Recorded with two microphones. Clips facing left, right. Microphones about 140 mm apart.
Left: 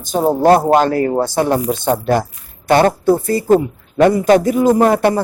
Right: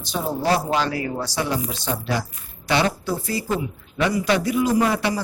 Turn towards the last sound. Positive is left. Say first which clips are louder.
# left 8 dB
turn(degrees=50)  # may be behind; listen again after turning